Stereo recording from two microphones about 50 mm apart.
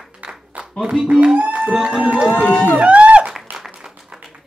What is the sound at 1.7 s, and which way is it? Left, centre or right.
Speech, centre.